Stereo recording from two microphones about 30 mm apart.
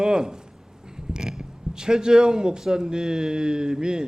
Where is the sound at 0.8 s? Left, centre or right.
Right.